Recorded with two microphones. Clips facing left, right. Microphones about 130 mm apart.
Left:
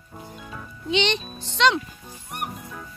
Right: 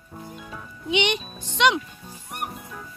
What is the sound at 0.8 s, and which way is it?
Speech, 15° right (ahead or behind).